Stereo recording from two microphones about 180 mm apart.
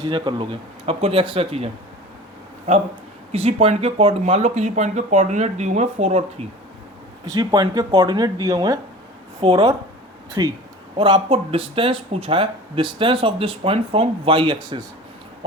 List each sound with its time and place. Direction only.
0.0 s speech: 25° right (ahead or behind)
3.3 s speech: 35° right (ahead or behind)
7.3 s speech: 20° right (ahead or behind)
9.4 s speech: 30° right (ahead or behind)